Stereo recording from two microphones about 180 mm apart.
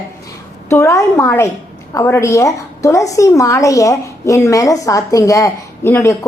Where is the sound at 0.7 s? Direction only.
15° left (ahead or behind).